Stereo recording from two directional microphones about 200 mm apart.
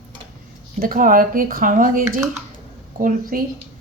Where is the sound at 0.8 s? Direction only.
45° right (ahead or behind).